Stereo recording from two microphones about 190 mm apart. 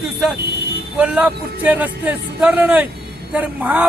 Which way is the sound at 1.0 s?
5° right (ahead or behind).